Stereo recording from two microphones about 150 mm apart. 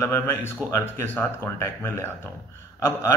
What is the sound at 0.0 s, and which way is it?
Speech, 15° left (ahead or behind).